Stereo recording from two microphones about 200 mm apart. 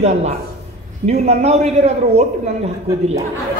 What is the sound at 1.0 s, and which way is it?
Speech, 35° right (ahead or behind).